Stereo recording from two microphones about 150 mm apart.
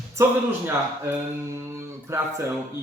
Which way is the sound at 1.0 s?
15° right (ahead or behind).